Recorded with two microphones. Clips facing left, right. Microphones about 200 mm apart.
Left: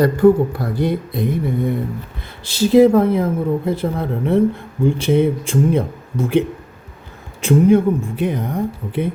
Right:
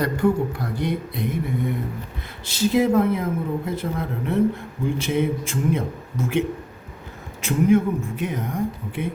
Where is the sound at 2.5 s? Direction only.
35° left (ahead or behind).